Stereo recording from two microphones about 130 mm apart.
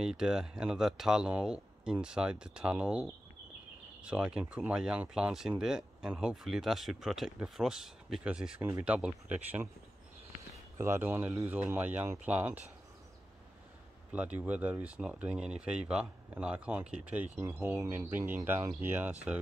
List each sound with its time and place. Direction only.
0.0 s speech: 5° right (ahead or behind)
10.8 s speech: 20° right (ahead or behind)
14.1 s speech: 10° right (ahead or behind)